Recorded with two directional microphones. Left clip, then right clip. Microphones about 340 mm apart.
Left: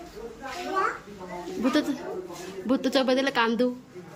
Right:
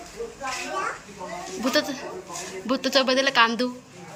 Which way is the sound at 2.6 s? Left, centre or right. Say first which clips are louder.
Right 2 dB; centre.